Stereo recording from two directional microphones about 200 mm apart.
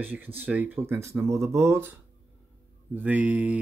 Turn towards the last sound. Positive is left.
turn(degrees=-10)  # may be behind; listen again after turning